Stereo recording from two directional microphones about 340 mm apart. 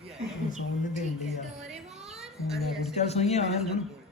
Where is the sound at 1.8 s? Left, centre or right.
Centre.